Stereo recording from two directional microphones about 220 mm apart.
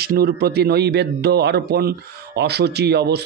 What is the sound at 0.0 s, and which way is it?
Speech, 45° right (ahead or behind).